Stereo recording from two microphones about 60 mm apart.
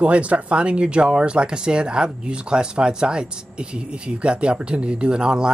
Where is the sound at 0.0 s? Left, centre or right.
Right.